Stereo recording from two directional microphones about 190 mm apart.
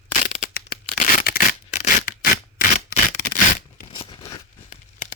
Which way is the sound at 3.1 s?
45° left (ahead or behind).